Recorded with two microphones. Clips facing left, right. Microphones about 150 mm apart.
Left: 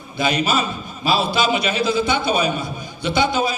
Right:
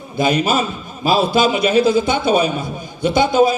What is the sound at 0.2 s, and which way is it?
A man's voice, 45° right (ahead or behind).